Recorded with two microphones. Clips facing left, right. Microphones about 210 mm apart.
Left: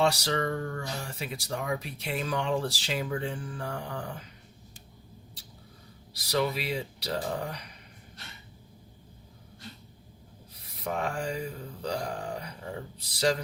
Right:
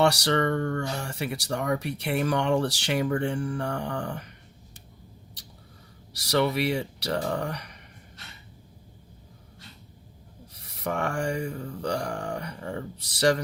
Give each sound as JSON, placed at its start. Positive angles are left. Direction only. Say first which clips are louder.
{"t": 0.0, "sound": "speech", "louder": "right 4 dB", "side_deg": -70}
{"t": 6.1, "sound": "speech", "louder": "right 4 dB", "side_deg": -75}
{"t": 10.8, "sound": "speech", "louder": "right 3 dB", "side_deg": -75}